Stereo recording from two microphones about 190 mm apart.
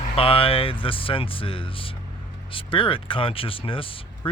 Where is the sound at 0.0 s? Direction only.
30° left (ahead or behind).